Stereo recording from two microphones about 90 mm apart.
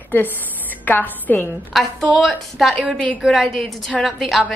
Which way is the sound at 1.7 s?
Centre (ahead or behind).